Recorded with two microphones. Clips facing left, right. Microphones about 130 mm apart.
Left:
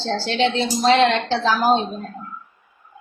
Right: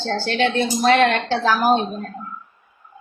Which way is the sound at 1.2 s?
10° right (ahead or behind).